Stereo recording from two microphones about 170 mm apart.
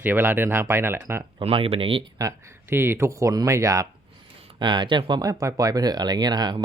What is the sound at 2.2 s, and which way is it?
Speech, 20° right (ahead or behind).